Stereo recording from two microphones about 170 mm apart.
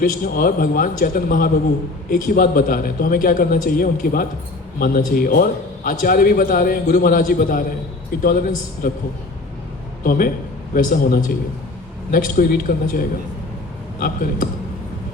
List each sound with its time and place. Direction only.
0.0 s a man's voice: 55° left (ahead or behind)
10.0 s a man's voice: 55° left (ahead or behind)